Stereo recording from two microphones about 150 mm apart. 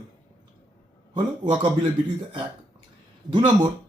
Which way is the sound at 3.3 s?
35° right (ahead or behind).